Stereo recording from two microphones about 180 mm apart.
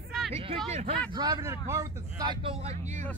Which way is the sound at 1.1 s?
20° right (ahead or behind).